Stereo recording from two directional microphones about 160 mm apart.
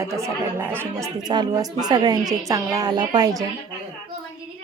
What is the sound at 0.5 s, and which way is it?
Speech, 15° right (ahead or behind).